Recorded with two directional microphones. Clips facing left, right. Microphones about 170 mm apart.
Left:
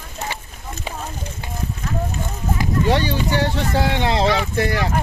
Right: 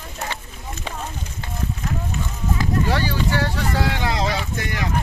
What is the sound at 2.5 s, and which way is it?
Speech, 25° left (ahead or behind).